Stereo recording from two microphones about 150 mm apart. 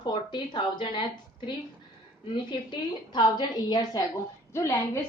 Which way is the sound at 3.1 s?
30° left (ahead or behind).